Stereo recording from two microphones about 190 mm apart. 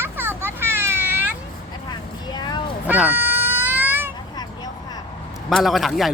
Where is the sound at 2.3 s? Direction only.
20° left (ahead or behind).